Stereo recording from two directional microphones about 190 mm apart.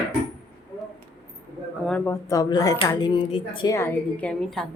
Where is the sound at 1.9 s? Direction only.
15° left (ahead or behind).